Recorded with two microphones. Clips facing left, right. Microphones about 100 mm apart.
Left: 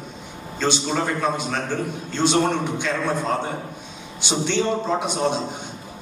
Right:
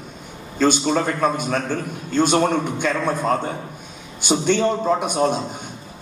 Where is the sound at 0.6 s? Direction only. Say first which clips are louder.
Right 5 dB; 50° right (ahead or behind).